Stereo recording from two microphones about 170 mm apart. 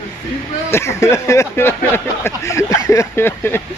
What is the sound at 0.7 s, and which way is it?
Speech, 15° left (ahead or behind).